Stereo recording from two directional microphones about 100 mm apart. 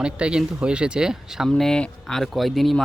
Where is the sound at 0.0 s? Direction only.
10° right (ahead or behind).